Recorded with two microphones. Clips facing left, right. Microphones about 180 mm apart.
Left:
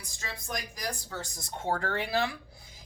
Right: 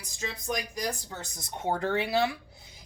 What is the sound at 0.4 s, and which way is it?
A woman's voice, 20° right (ahead or behind).